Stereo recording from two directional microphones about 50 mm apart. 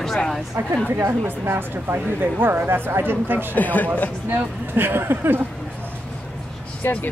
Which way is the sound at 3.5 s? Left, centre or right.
Left.